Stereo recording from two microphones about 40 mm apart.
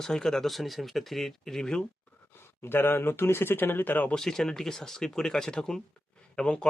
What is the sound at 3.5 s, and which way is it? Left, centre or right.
Speech, left.